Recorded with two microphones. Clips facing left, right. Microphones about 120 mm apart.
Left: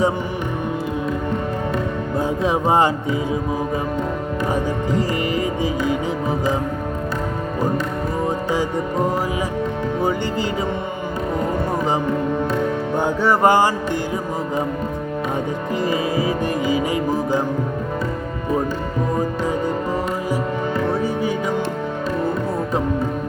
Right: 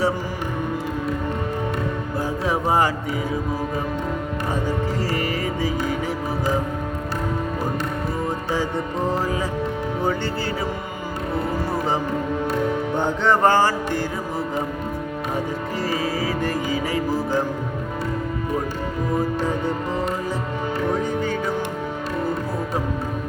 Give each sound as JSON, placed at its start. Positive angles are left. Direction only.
{"t": 2.1, "sound": "speech", "side_deg": 20}
{"t": 4.5, "sound": "music", "side_deg": 20}
{"t": 12.9, "sound": "music", "side_deg": 10}
{"t": 15.8, "sound": "music", "side_deg": 20}
{"t": 20.9, "sound": "music", "side_deg": 10}